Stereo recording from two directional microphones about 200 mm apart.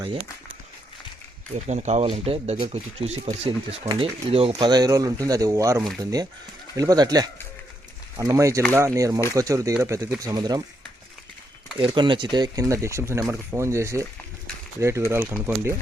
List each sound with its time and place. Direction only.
1.5 s speech: 35° right (ahead or behind); by 10.6 s 20° right (ahead or behind)
11.8 s speech: 25° right (ahead or behind)